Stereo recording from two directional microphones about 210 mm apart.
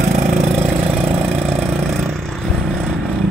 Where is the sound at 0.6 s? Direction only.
10° right (ahead or behind).